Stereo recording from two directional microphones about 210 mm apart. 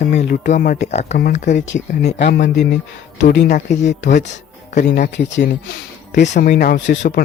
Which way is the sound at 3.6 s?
35° left (ahead or behind).